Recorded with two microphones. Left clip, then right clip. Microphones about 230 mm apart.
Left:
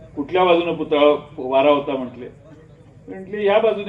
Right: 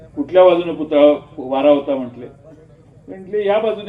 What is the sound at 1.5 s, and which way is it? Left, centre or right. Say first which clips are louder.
Speech: right 2 dB; right.